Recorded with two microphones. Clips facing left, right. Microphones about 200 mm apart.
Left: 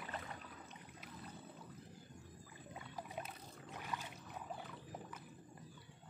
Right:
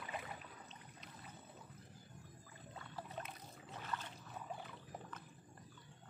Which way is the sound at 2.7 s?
15° left (ahead or behind).